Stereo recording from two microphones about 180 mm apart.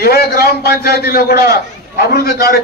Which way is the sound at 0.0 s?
60° left (ahead or behind).